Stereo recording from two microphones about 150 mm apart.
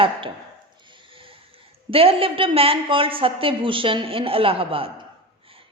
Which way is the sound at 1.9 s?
40° right (ahead or behind).